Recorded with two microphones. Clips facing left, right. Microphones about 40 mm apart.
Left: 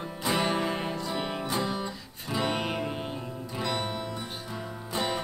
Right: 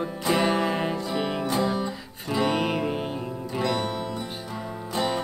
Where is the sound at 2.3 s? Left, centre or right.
Centre.